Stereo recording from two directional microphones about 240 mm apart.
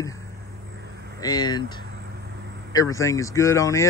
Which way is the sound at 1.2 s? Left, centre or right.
Centre.